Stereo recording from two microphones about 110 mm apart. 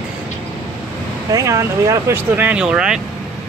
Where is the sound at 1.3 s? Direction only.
30° right (ahead or behind).